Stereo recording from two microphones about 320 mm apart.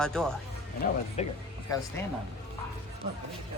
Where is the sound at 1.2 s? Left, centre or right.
Left.